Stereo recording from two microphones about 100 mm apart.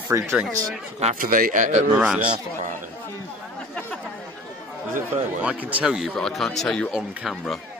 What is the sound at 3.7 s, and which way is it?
Chatter, 15° left (ahead or behind).